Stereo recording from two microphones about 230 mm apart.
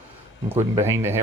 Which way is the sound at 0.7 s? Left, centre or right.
Centre.